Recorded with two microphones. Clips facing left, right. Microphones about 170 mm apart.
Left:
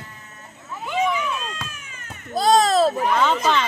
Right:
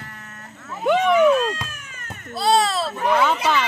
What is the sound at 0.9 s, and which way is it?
Vehicle, 60° right (ahead or behind).